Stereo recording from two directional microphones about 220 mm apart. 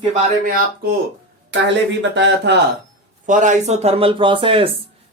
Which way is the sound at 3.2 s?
35° right (ahead or behind).